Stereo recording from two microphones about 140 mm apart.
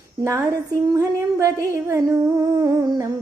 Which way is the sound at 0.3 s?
20° right (ahead or behind).